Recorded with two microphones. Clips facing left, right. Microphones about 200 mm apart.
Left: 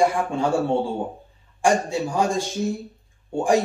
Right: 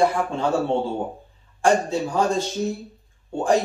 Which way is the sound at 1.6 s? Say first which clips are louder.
Right 1 dB; 15° left (ahead or behind).